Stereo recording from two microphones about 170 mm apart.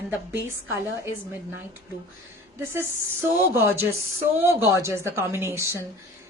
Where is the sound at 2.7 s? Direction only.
15° right (ahead or behind).